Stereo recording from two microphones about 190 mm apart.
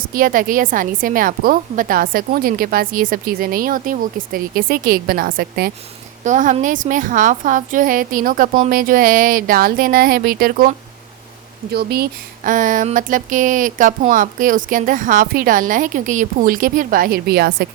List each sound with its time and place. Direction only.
0.1 s a woman's voice: 45° right (ahead or behind)
6.2 s a woman's voice: 40° right (ahead or behind)
12.5 s a woman's voice: 45° right (ahead or behind)